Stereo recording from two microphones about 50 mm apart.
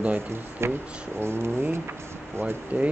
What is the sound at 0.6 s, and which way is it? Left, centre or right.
Speech, right.